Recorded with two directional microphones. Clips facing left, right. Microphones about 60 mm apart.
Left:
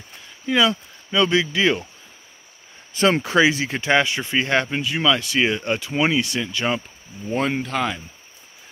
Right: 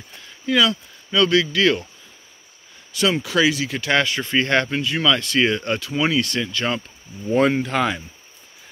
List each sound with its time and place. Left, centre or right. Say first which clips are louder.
0.5 s speech: even; left
2.9 s speech: left 2 dB; left
3.9 s speech: even; centre
7.3 s speech: right 4 dB; centre